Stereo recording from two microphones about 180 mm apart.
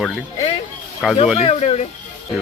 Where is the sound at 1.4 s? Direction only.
35° left (ahead or behind).